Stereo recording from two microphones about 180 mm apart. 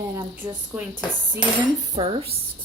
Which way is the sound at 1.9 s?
30° right (ahead or behind).